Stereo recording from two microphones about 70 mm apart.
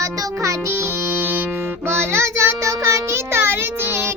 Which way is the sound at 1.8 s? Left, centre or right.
Right.